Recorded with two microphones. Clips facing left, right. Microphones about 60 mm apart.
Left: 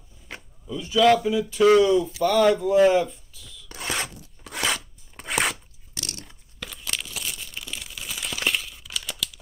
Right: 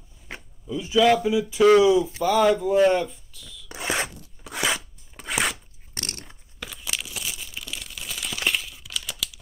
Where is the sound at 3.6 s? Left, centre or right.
Right.